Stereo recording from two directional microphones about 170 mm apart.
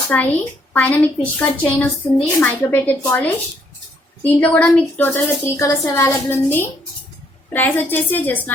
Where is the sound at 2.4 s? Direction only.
10° left (ahead or behind).